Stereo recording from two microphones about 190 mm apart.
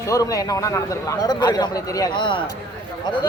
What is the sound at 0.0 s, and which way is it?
A man's voice, 15° left (ahead or behind).